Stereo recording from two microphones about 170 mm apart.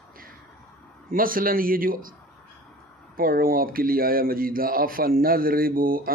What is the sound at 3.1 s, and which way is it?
Speech, 60° right (ahead or behind).